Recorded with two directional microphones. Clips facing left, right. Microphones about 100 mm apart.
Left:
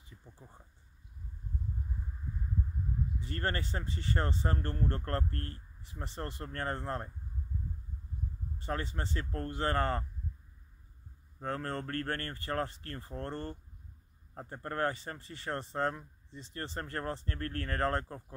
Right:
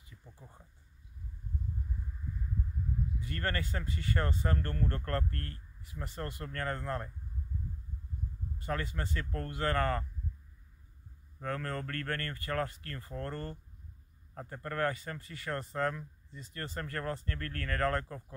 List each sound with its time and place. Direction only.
3.2 s speech: 30° left (ahead or behind)
8.5 s speech: 30° left (ahead or behind)
11.4 s speech: 30° left (ahead or behind)